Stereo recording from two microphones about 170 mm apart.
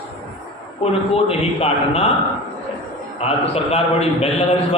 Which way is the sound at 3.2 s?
35° left (ahead or behind).